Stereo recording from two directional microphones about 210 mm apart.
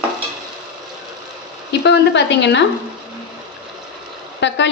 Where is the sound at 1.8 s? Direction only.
55° left (ahead or behind).